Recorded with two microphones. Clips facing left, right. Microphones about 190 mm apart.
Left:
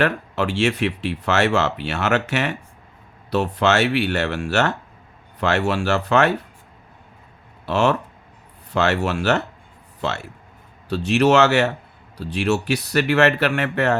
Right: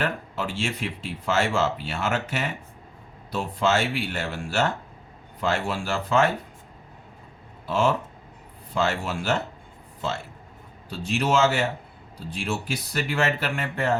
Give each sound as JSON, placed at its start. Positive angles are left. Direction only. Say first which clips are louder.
{"t": 0.0, "sound": "speech", "louder": "left 7 dB", "side_deg": 70}
{"t": 7.7, "sound": "speech", "louder": "left 4 dB", "side_deg": 70}